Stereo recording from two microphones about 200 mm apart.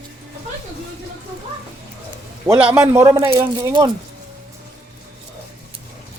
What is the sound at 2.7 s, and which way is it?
Speech, 15° right (ahead or behind).